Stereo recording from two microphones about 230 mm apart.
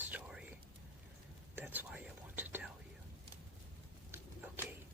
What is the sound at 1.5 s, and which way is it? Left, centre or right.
Whispering, centre.